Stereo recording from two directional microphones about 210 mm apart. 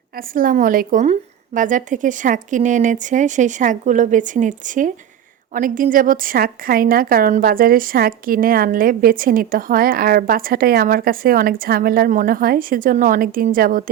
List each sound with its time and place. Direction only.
0.2 s a woman's voice: 40° right (ahead or behind)